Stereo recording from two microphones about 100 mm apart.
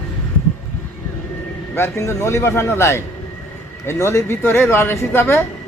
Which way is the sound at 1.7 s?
25° left (ahead or behind).